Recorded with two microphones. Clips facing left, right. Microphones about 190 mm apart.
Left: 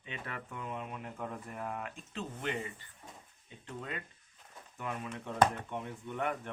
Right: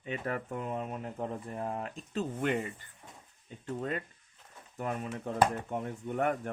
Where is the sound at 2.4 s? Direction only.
50° right (ahead or behind).